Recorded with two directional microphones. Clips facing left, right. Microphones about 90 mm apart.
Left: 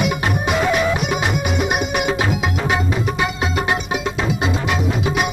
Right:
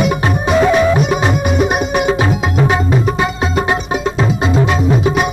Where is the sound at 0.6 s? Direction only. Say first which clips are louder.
Right 8 dB; 35° right (ahead or behind).